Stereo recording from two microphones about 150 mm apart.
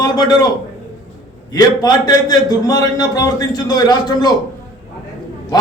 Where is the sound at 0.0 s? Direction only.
25° left (ahead or behind).